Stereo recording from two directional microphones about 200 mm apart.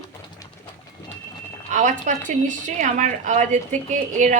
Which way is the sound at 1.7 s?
35° right (ahead or behind).